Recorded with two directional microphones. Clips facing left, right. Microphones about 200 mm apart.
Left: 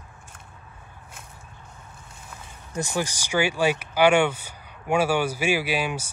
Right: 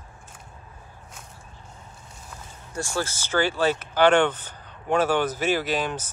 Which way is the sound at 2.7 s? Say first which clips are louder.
Left 1 dB; 15° left (ahead or behind).